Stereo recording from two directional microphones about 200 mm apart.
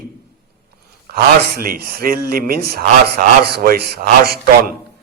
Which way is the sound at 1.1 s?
50° right (ahead or behind).